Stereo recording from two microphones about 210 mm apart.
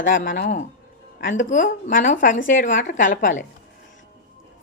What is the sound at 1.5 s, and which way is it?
Speech, 35° left (ahead or behind).